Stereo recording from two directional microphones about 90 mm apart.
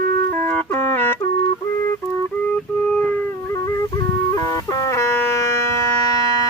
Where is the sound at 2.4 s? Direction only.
15° left (ahead or behind).